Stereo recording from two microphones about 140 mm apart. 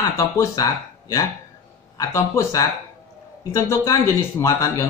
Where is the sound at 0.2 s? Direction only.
25° left (ahead or behind).